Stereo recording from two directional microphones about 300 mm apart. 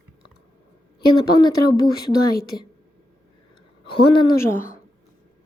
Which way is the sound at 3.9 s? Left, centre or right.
Centre.